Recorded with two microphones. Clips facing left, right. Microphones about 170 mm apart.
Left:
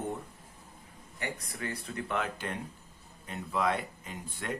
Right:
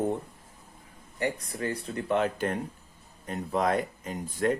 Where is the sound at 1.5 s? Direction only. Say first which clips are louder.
Right 6 dB; 30° right (ahead or behind).